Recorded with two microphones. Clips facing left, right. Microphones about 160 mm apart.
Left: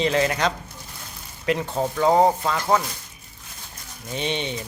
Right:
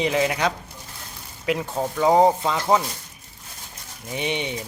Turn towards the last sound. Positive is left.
turn(degrees=-15)  # may be behind; listen again after turning